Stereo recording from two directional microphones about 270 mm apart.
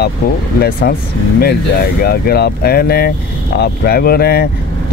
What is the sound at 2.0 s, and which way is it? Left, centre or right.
Speech, left.